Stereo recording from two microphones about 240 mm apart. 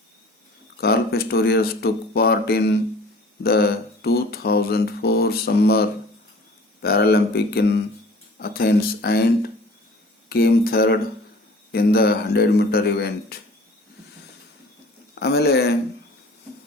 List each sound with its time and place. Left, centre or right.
0.8 s speech: left
15.1 s speech: left